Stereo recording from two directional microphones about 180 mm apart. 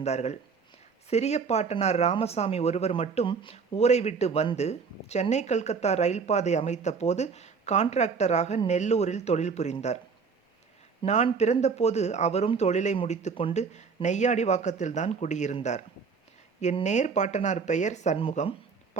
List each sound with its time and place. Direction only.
0.0 s speech: 35° left (ahead or behind)
11.0 s speech: 40° left (ahead or behind)